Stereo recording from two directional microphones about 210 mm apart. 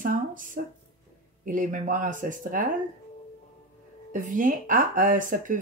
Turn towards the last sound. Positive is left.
turn(degrees=-40)  # may be behind; listen again after turning